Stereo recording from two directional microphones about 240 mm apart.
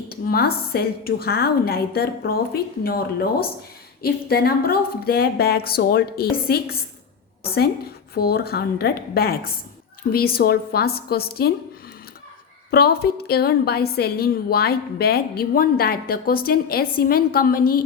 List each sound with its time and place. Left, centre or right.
0.1 s a woman's voice: left
4.0 s a woman's voice: left
8.1 s a woman's voice: left
12.7 s a woman's voice: left